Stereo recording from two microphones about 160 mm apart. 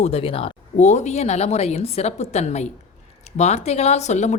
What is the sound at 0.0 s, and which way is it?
A woman's voice, 35° left (ahead or behind).